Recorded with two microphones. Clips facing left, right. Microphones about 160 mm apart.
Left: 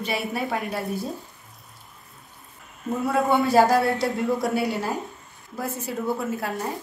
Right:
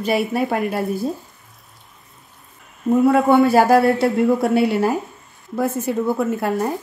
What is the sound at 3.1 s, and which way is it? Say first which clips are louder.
A man's voice: right 6 dB; 65° right (ahead or behind).